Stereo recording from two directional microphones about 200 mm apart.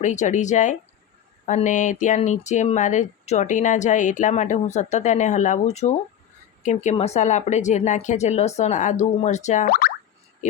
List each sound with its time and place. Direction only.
0.0 s speech: 40° left (ahead or behind)
10.4 s speech: 35° left (ahead or behind)